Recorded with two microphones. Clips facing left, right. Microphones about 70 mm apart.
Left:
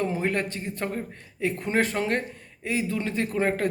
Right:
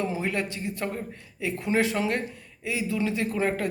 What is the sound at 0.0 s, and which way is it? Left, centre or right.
Speech, left.